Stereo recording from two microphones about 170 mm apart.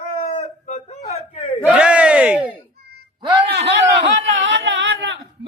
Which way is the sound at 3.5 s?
90° right.